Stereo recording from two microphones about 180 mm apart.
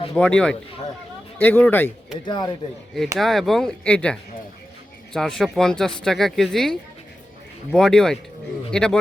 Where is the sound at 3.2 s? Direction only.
Centre (ahead or behind).